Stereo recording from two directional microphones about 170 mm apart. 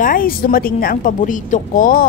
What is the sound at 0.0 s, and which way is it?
A woman's voice, 55° left (ahead or behind).